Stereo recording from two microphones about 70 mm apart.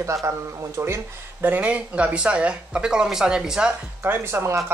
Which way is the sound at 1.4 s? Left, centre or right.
Right.